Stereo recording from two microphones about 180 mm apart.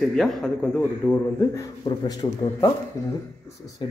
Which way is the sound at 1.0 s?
20° left (ahead or behind).